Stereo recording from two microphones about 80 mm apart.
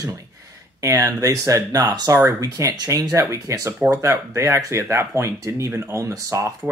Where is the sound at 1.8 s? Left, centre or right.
Right.